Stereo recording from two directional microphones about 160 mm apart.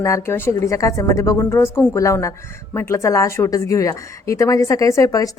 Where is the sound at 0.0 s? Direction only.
15° left (ahead or behind).